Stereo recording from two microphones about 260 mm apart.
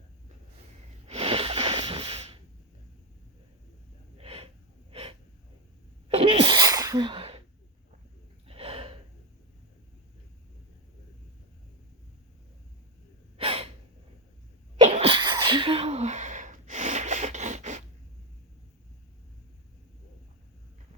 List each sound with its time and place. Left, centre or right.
1.0 s snort: right
4.2 s snort: right
4.9 s gasp: right
6.1 s sneeze: right
8.4 s gasp: right
13.3 s gasp: right
14.8 s sneeze: right